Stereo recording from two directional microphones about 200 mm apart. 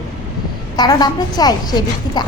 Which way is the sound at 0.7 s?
20° left (ahead or behind).